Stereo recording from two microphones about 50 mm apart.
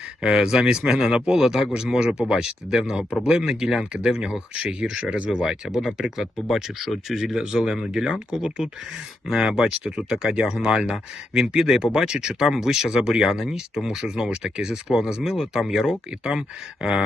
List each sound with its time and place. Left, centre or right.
0.2 s speech: centre